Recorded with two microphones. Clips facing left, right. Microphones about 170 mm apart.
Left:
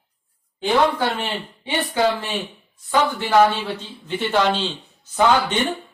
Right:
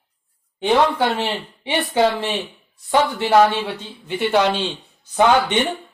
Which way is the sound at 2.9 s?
20° right (ahead or behind).